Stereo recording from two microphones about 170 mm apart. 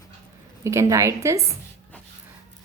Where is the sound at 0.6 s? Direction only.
15° right (ahead or behind).